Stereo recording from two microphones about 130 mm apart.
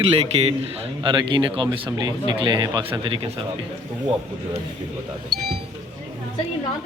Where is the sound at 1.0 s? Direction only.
35° right (ahead or behind).